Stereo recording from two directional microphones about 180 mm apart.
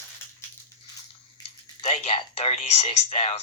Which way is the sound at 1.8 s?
35° left (ahead or behind).